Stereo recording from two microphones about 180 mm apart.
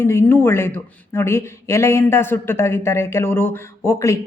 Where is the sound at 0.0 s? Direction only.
15° left (ahead or behind).